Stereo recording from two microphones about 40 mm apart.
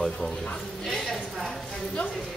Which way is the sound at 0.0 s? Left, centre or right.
Centre.